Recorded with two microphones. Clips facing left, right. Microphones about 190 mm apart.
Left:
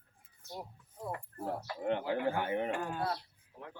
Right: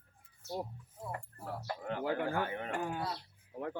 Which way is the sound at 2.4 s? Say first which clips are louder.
Left 4 dB; 20° left (ahead or behind).